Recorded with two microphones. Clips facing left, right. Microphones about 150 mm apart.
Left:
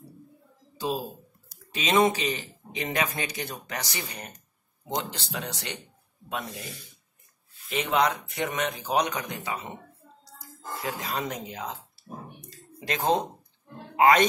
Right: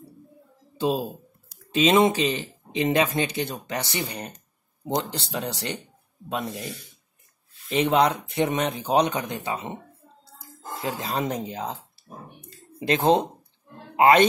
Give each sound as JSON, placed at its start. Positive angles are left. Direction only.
{"t": 0.7, "sound": "speech", "side_deg": -30}
{"t": 7.8, "sound": "speech", "side_deg": -30}
{"t": 12.4, "sound": "a sound", "side_deg": -30}
{"t": 13.9, "sound": "a man's voice", "side_deg": -30}